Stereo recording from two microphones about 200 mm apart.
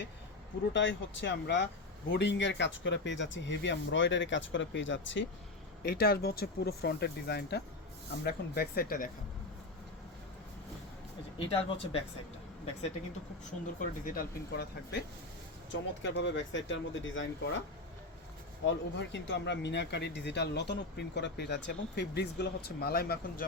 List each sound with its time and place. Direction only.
0.7 s speech: 65° left (ahead or behind)
5.8 s speech: 50° left (ahead or behind)
11.3 s speech: 30° left (ahead or behind)
13.7 s speech: 45° left (ahead or behind); by 17.6 s 70° left (ahead or behind)
18.6 s speech: 60° left (ahead or behind)